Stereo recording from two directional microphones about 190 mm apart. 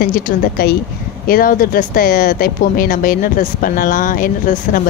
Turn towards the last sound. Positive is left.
turn(degrees=45)  # may be behind; listen again after turning